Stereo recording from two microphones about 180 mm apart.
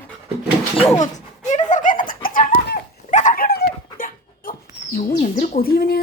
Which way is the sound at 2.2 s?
50° left (ahead or behind).